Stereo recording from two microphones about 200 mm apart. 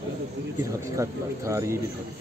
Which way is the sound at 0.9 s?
15° right (ahead or behind).